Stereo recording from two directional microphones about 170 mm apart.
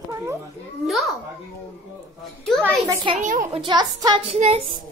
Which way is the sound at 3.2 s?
50° right (ahead or behind).